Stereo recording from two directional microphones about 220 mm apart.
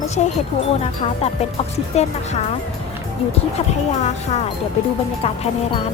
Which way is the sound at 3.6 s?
30° left (ahead or behind).